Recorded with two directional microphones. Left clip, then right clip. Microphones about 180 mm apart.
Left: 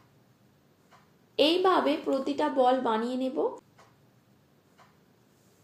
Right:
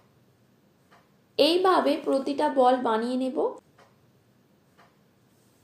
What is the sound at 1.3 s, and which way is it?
A woman's voice, 35° right (ahead or behind).